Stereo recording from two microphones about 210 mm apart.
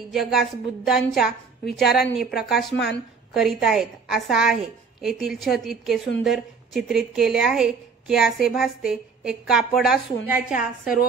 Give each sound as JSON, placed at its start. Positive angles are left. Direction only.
{"t": 0.1, "sound": "a woman's voice", "side_deg": 0}